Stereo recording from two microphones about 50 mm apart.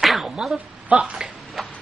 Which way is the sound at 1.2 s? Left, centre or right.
Centre.